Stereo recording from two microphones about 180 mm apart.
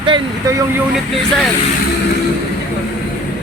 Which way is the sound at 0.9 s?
Centre (ahead or behind).